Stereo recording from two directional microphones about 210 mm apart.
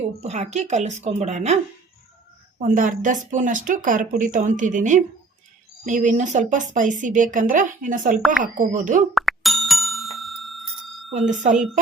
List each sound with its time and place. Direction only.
0.2 s speech: 35° right (ahead or behind)
2.6 s speech: 40° right (ahead or behind)
8.2 s speech: centre (ahead or behind)
8.5 s speech: 40° right (ahead or behind)
9.1 s bicycle bell: centre (ahead or behind)
11.1 s speech: 35° right (ahead or behind)